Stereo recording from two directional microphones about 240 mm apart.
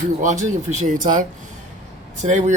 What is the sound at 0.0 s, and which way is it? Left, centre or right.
Speech, right.